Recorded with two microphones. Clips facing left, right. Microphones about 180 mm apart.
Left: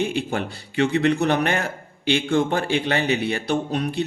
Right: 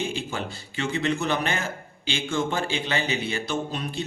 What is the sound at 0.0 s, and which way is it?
A man's voice, 65° left (ahead or behind).